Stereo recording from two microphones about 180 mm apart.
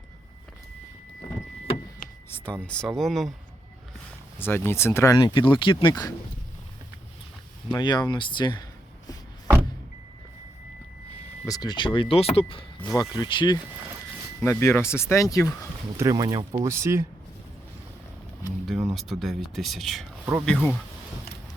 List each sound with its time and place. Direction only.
2.3 s speech: 10° left (ahead or behind)
4.4 s speech: 10° left (ahead or behind)
7.8 s speech: 25° left (ahead or behind)
11.4 s speech: 20° left (ahead or behind)
14.4 s speech: 15° left (ahead or behind)
16.0 s speech: 20° right (ahead or behind)
18.6 s a sound: centre (ahead or behind)
18.9 s speech: centre (ahead or behind)